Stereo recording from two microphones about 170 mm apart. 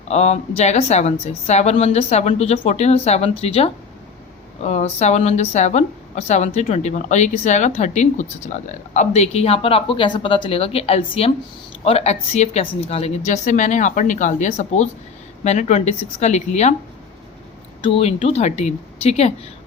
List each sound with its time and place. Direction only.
0.1 s a woman's voice: 40° left (ahead or behind)
17.8 s a woman's voice: 35° left (ahead or behind)